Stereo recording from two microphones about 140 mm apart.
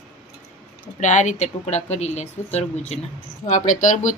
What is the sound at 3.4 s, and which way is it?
Speech, 65° left (ahead or behind).